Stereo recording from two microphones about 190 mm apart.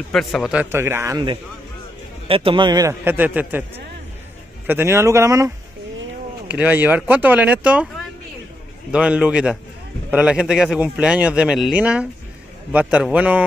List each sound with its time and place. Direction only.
0.1 s speech: centre (ahead or behind); by 1.2 s 15° right (ahead or behind)
2.2 s speech: 30° right (ahead or behind); by 3.6 s 10° right (ahead or behind)
4.6 s speech: 10° right (ahead or behind)
8.9 s speech: 5° right (ahead or behind)